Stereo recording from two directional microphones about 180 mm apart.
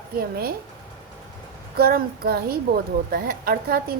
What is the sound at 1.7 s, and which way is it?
A woman's voice, 55° right (ahead or behind).